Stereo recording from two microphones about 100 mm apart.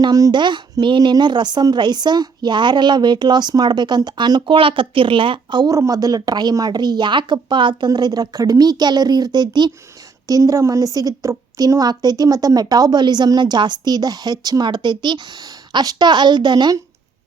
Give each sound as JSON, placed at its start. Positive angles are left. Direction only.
{"t": 0.0, "sound": "a woman's voice", "side_deg": -40}
{"t": 5.7, "sound": "a woman's voice", "side_deg": -35}